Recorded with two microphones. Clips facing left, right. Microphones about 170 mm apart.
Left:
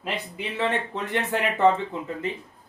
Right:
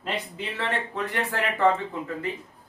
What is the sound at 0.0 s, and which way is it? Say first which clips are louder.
Speech: even; 15° left (ahead or behind).